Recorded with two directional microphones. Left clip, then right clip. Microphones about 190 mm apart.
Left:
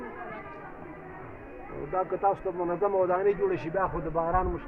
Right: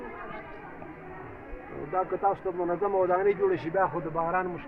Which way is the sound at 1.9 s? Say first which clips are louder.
Even; 5° right (ahead or behind).